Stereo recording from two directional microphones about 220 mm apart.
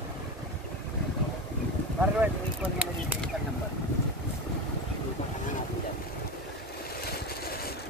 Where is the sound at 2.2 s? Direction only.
5° right (ahead or behind).